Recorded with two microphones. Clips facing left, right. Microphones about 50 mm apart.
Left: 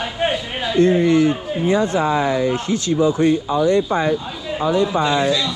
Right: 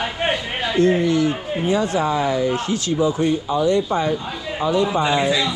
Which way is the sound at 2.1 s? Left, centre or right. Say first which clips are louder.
Left 2 dB; left.